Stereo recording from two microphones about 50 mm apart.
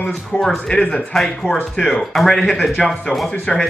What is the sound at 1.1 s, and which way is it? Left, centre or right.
A man's voice, centre.